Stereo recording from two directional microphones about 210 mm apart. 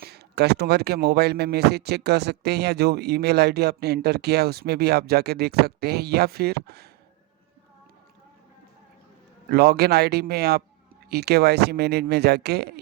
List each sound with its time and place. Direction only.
0.0 s speech: 50° right (ahead or behind)
9.5 s speech: 50° right (ahead or behind)